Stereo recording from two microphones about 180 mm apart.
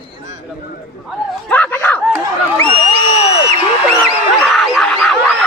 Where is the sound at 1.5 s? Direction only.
10° left (ahead or behind).